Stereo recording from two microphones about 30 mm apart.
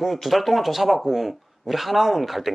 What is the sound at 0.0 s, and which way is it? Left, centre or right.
Speech, centre.